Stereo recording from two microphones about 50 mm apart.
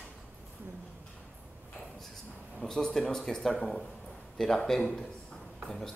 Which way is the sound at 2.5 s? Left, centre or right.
Centre.